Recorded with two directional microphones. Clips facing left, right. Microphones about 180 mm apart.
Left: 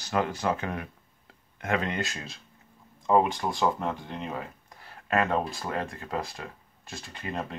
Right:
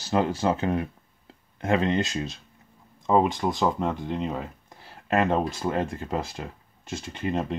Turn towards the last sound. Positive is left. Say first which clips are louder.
# right 7 dB
turn(degrees=-20)  # may be behind; listen again after turning